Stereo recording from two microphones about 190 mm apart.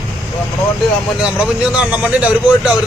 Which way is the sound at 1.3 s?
5° right (ahead or behind).